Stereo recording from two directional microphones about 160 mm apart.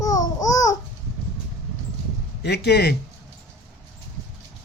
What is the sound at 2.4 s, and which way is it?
Speech, 90° left.